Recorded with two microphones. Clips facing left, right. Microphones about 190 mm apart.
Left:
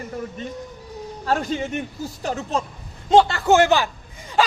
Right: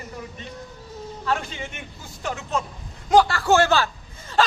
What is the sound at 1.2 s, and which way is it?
Speech, 40° left (ahead or behind).